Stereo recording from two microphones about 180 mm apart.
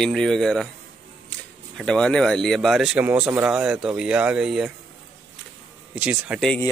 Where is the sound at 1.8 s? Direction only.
5° left (ahead or behind).